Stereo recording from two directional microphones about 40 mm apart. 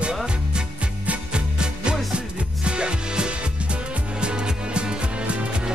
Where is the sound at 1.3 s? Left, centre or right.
Right.